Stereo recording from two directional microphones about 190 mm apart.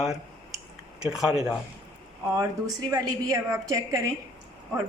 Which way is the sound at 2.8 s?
20° right (ahead or behind).